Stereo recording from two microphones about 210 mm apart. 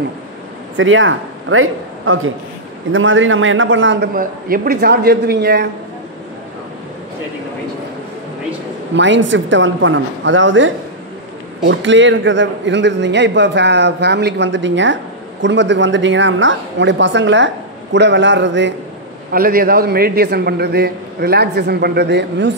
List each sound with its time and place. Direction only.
0.7 s a man's voice: 65° right (ahead or behind)
4.1 s a man's voice: 45° right (ahead or behind)
8.9 s a man's voice: 60° right (ahead or behind)
19.3 s a man's voice: 45° right (ahead or behind)